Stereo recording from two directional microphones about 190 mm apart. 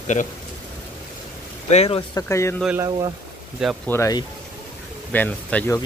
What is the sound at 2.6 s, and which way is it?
Speech, 10° right (ahead or behind).